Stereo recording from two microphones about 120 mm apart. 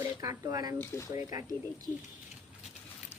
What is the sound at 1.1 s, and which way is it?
Speech, 25° right (ahead or behind).